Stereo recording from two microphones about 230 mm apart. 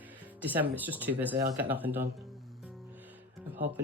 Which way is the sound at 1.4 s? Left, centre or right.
Right.